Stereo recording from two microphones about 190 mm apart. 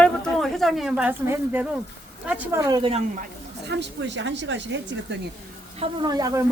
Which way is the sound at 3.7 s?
65° right (ahead or behind).